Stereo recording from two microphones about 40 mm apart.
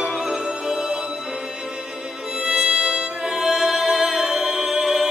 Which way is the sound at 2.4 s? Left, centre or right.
Right.